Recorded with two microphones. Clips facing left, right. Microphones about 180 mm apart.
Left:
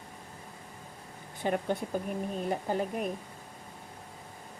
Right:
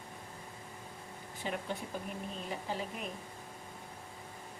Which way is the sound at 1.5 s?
50° left (ahead or behind).